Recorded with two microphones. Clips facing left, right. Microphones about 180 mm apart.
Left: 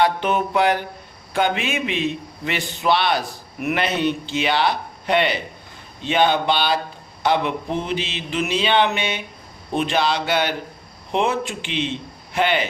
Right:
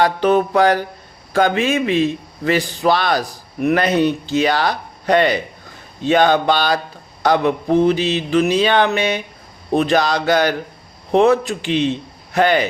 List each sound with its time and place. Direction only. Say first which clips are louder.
0.0 s a man's voice: right 5 dB; 40° right (ahead or behind)